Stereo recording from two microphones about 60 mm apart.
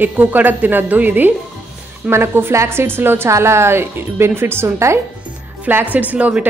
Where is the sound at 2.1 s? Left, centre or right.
Right.